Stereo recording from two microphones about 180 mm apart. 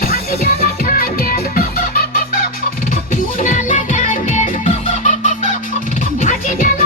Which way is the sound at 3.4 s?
45° left (ahead or behind).